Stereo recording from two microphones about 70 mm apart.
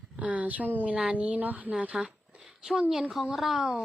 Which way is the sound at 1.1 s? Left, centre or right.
Right.